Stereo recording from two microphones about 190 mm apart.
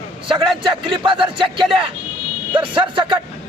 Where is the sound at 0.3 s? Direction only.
25° right (ahead or behind).